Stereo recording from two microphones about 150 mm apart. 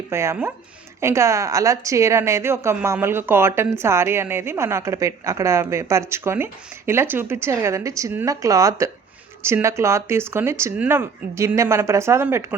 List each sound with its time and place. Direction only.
0.1 s a woman's voice: 15° right (ahead or behind)